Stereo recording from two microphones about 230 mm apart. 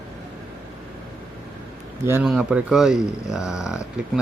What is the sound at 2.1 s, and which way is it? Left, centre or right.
Speech, centre.